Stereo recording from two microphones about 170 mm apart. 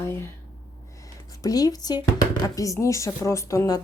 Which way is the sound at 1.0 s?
20° left (ahead or behind).